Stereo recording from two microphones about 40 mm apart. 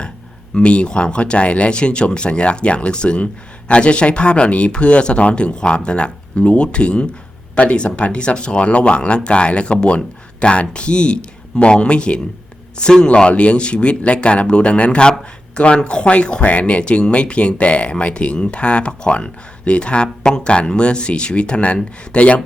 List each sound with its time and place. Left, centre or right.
0.5 s speech: left